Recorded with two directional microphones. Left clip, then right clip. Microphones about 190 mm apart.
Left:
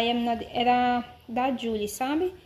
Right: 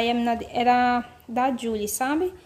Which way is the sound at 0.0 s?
15° right (ahead or behind).